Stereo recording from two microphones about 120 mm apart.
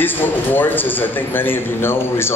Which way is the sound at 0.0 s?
15° left (ahead or behind).